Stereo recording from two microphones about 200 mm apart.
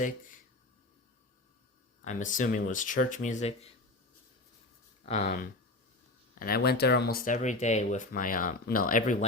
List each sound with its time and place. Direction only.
2.0 s speech: 40° left (ahead or behind)
5.0 s speech: 35° left (ahead or behind)
6.4 s speech: 50° left (ahead or behind)
7.3 s speech: 35° left (ahead or behind)